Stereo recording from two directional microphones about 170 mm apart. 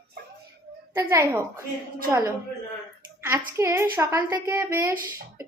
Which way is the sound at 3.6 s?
15° right (ahead or behind).